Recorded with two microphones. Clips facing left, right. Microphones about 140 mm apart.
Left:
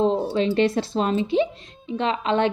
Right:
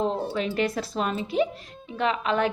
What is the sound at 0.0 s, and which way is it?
Speech, 30° left (ahead or behind).